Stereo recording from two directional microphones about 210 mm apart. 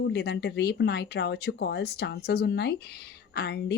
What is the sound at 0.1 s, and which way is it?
Speech, 50° left (ahead or behind).